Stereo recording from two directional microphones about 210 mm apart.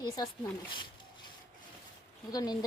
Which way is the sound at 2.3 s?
20° left (ahead or behind).